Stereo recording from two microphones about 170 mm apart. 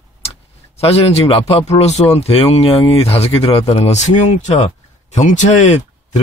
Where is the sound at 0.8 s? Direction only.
35° left (ahead or behind).